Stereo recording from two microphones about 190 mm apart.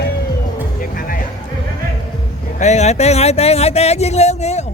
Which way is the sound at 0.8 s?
45° left (ahead or behind).